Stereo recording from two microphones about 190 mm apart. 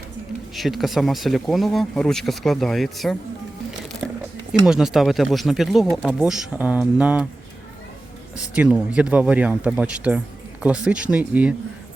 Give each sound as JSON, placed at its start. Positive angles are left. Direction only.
{"t": 0.5, "sound": "speech", "side_deg": 0}
{"t": 4.6, "sound": "speech", "side_deg": -5}
{"t": 8.5, "sound": "speech", "side_deg": -5}